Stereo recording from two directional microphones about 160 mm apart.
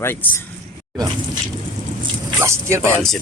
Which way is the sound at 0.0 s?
15° left (ahead or behind).